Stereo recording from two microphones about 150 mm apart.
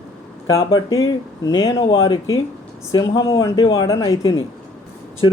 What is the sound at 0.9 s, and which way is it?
Speech, 25° left (ahead or behind).